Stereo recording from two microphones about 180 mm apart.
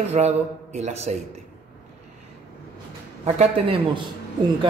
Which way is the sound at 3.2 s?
35° right (ahead or behind).